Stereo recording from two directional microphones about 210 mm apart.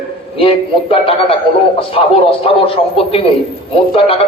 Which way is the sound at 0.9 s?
25° left (ahead or behind).